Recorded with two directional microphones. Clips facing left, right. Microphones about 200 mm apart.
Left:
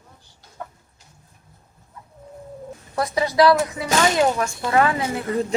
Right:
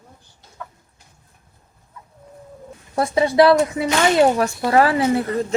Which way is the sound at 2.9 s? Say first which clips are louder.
Right 4 dB; 25° right (ahead or behind).